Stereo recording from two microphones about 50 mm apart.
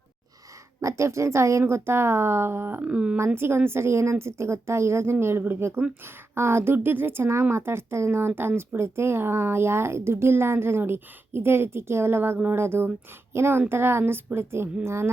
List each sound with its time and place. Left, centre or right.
0.8 s a woman's voice: right
1.6 s speech: right
2.8 s speech: right
3.3 s speech: right
6.7 s a woman's voice: right